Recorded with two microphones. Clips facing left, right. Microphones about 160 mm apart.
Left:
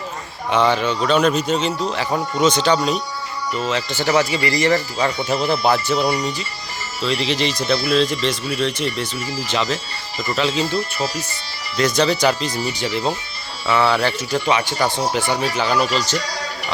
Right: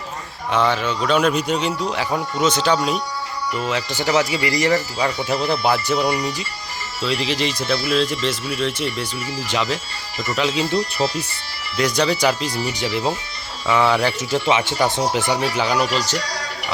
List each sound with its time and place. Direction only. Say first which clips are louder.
0.5 s speech: left 2 dB; centre (ahead or behind)
11.8 s speech: left 1 dB; 10° right (ahead or behind)